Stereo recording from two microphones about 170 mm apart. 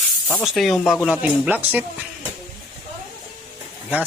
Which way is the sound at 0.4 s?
Centre (ahead or behind).